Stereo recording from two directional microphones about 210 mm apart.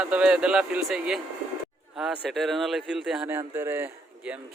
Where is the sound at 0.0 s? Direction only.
5° right (ahead or behind).